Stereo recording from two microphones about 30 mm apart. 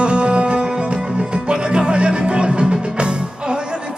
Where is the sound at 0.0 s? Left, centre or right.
Right.